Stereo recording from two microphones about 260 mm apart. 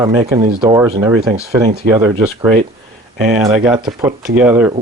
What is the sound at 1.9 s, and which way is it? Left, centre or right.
Speech, centre.